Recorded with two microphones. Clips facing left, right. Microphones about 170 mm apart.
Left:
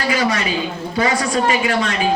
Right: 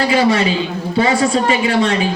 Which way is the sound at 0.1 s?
30° right (ahead or behind).